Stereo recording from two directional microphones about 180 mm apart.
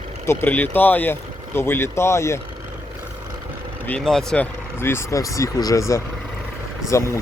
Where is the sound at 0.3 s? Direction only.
10° left (ahead or behind).